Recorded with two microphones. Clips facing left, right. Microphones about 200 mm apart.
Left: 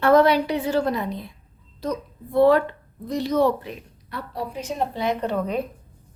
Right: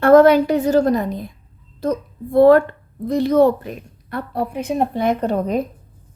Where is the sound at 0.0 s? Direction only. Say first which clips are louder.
Right 6 dB; 50° right (ahead or behind).